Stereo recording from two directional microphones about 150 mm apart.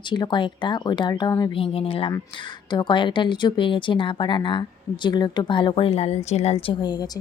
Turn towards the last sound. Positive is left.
turn(degrees=30)  # may be behind; listen again after turning